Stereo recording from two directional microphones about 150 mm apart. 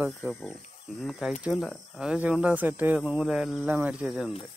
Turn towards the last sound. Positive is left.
turn(degrees=-5)  # may be behind; listen again after turning